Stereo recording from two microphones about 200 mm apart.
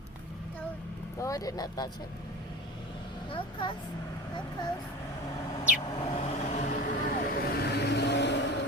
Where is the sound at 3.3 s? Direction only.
25° left (ahead or behind).